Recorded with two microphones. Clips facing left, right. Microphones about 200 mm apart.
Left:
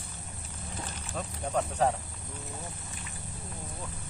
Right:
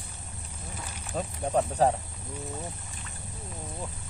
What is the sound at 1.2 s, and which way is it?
Speech, 35° right (ahead or behind).